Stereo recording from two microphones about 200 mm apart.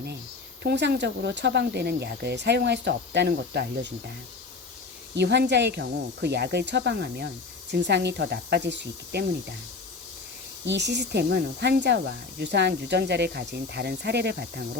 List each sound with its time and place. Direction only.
0.6 s speech: 55° right (ahead or behind)
5.1 s speech: 55° right (ahead or behind)
10.7 s speech: 60° right (ahead or behind)